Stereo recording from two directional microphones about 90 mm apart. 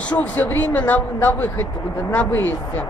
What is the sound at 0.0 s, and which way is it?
Speech, 15° left (ahead or behind).